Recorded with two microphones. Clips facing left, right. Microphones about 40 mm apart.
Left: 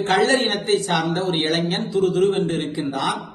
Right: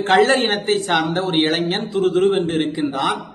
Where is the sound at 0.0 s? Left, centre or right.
Right.